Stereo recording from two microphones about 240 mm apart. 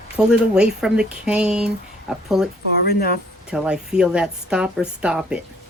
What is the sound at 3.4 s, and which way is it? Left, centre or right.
Speech, centre.